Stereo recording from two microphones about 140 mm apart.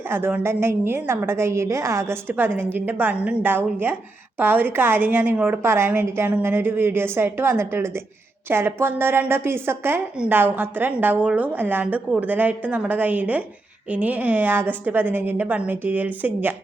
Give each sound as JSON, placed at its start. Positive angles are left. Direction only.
{"t": 0.1, "sound": "a woman's voice", "side_deg": -15}